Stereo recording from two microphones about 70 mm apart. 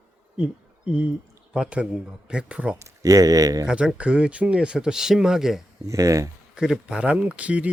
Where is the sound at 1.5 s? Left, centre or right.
Centre.